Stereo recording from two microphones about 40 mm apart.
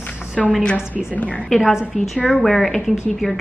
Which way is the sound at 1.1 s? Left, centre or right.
Left.